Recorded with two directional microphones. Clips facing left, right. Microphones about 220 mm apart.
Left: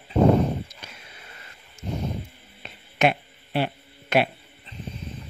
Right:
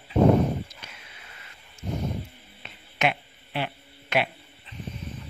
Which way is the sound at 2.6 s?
40° left (ahead or behind).